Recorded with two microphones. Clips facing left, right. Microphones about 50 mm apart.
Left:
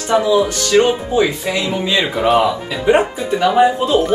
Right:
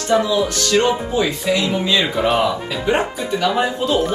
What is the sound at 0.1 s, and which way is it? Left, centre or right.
Speech, left.